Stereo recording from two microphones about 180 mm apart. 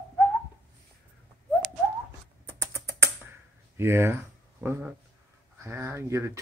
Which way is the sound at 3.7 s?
15° right (ahead or behind).